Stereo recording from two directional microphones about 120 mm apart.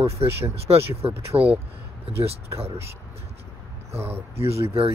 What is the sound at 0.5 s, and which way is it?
Speech, 55° right (ahead or behind).